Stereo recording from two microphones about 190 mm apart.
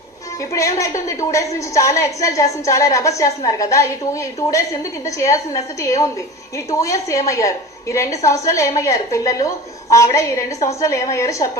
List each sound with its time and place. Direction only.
0.5 s a woman's voice: 15° left (ahead or behind)